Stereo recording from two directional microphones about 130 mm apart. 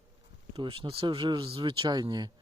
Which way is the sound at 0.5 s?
45° right (ahead or behind).